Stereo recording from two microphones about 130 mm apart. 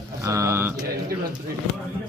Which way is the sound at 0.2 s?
25° right (ahead or behind).